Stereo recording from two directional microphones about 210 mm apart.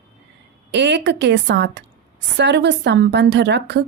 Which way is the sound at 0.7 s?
55° right (ahead or behind).